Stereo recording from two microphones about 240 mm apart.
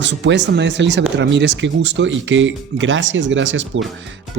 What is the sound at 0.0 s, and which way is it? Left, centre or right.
Speech, right.